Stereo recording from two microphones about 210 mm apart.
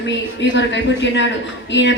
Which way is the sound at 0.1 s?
60° left (ahead or behind).